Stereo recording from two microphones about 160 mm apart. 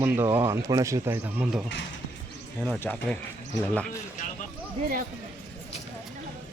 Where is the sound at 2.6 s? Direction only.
10° left (ahead or behind).